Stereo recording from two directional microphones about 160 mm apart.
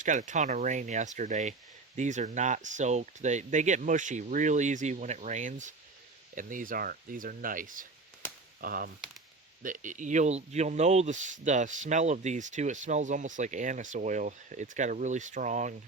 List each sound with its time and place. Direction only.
0.0 s speech: 50° right (ahead or behind)
9.6 s speech: 55° right (ahead or behind)